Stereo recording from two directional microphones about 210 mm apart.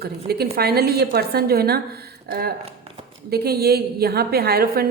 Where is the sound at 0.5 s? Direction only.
50° right (ahead or behind).